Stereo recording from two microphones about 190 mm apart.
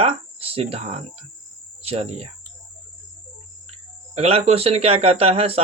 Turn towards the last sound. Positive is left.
turn(degrees=-30)  # may be behind; listen again after turning